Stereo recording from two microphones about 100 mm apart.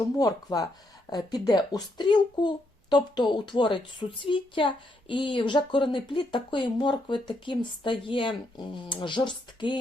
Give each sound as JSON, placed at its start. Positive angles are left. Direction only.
{"t": 0.2, "sound": "speech", "side_deg": 35}